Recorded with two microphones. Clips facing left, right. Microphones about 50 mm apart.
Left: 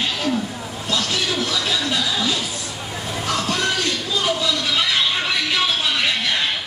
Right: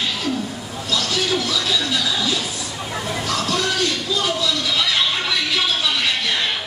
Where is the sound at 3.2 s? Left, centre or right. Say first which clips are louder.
Left 1 dB; left.